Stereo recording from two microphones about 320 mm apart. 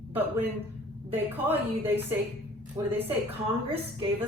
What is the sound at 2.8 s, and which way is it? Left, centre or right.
Speech, centre.